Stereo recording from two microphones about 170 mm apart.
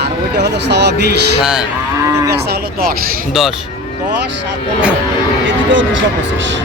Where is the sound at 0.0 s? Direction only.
80° right.